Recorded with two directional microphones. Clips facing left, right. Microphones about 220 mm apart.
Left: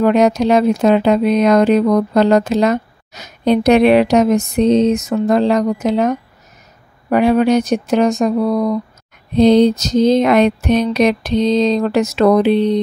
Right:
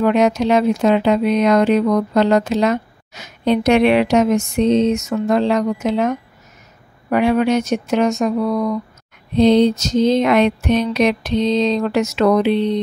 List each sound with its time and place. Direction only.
0.0 s speech: 40° left (ahead or behind)